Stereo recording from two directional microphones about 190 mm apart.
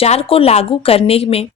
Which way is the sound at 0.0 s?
30° left (ahead or behind).